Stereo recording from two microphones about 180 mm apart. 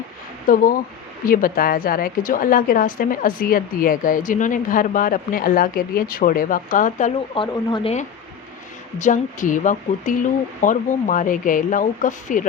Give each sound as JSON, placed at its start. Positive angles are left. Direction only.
{"t": 0.4, "sound": "a woman's voice", "side_deg": 50}
{"t": 7.3, "sound": "speech", "side_deg": 25}
{"t": 9.0, "sound": "a woman's voice", "side_deg": 45}